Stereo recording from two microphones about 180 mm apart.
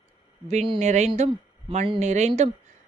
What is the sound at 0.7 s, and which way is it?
Speech, 40° right (ahead or behind).